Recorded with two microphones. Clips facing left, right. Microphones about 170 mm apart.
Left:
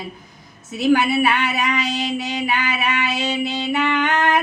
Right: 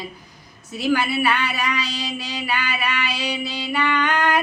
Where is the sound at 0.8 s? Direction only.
20° left (ahead or behind).